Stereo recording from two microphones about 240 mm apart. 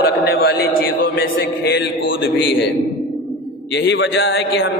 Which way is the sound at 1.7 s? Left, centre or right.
Left.